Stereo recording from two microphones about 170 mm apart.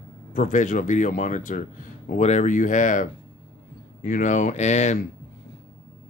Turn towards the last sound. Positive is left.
turn(degrees=45)  # may be behind; listen again after turning